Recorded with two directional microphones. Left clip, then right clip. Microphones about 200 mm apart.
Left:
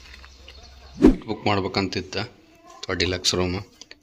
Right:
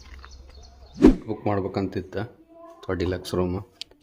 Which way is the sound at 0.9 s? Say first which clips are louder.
Even; centre (ahead or behind).